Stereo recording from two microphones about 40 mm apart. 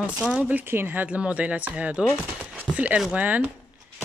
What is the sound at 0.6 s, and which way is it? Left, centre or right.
Speech, right.